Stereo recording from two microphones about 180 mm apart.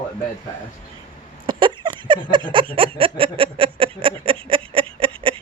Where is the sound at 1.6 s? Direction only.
25° right (ahead or behind).